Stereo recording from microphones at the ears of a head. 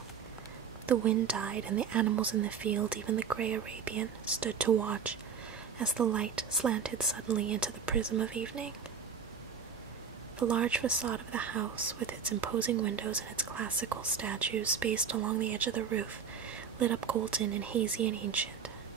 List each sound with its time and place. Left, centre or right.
0.8 s speech: right
10.4 s speech: right